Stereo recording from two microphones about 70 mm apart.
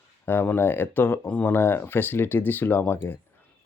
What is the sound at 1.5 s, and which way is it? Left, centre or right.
Speech, left.